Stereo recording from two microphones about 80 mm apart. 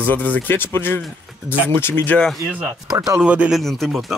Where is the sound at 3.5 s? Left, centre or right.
Centre.